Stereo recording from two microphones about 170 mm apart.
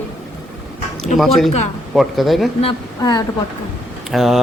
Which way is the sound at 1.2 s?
Centre (ahead or behind).